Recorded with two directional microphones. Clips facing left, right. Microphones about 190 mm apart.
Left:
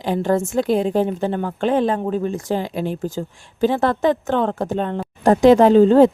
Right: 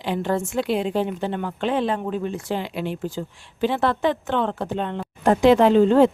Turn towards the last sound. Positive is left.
turn(degrees=40)  # may be behind; listen again after turning